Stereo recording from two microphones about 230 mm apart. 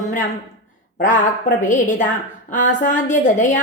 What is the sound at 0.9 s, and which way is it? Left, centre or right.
Speech, left.